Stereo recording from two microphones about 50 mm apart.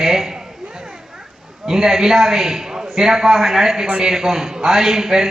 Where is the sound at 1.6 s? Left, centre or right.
Centre.